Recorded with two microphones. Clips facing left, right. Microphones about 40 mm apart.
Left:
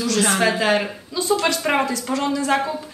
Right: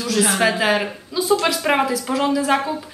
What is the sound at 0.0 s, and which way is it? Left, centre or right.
A woman's voice, centre.